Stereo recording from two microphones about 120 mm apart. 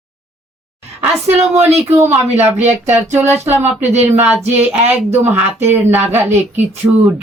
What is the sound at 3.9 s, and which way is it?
Speech, 70° right (ahead or behind).